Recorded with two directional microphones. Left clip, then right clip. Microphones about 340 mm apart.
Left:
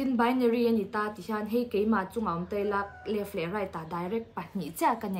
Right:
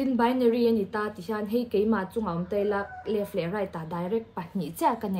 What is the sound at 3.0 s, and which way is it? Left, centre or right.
Speech, centre.